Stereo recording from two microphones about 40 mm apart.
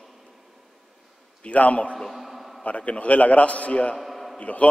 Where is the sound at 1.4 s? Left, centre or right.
Left.